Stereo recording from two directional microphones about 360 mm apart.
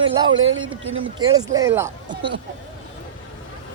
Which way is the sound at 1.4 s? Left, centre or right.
Centre.